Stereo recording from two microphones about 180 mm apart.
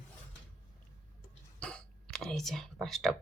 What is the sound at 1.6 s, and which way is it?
Whispering, 5° left (ahead or behind).